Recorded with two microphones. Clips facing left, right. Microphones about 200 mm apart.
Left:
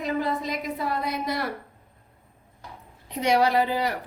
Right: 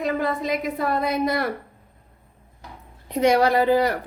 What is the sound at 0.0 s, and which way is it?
A woman's voice, 55° right (ahead or behind).